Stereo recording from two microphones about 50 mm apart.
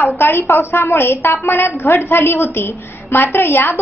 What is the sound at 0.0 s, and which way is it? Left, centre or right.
A woman's voice, left.